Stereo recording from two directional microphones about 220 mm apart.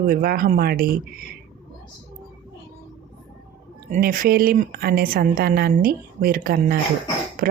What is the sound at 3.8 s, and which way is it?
A woman's voice, 35° right (ahead or behind).